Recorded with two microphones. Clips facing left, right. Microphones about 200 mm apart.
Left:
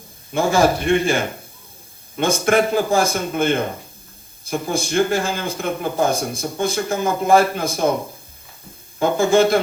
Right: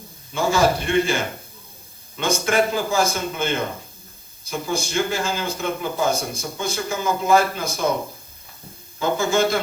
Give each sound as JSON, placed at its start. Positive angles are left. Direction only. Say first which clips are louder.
{"t": 0.3, "sound": "a man's voice", "louder": "left 3 dB", "side_deg": 55}
{"t": 9.0, "sound": "speech", "louder": "left 5 dB", "side_deg": 55}